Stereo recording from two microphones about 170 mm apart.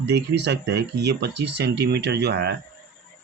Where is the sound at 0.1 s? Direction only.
80° right.